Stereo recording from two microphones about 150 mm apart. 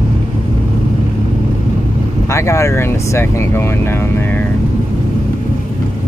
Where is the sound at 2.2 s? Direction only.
20° left (ahead or behind).